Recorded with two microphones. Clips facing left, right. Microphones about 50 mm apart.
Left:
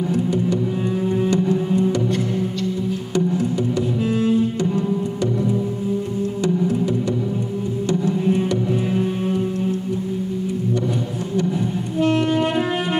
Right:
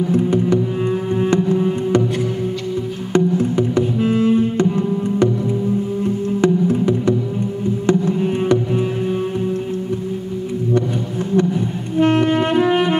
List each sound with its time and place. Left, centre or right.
0.1 s music: right
3.1 s music: right
6.4 s music: right
11.3 s a sound: right
12.6 s saxophone: right